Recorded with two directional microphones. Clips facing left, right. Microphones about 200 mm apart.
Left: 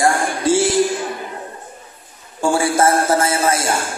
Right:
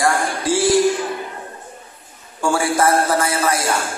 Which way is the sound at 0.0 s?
25° left (ahead or behind).